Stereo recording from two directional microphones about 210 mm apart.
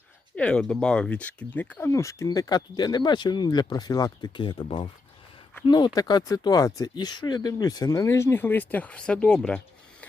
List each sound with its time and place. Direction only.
0.3 s speech: 5° left (ahead or behind)